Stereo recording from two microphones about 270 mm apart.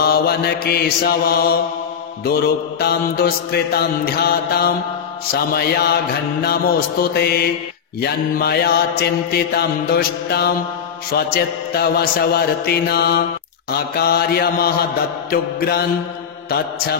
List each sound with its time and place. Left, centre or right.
0.0 s mantra: left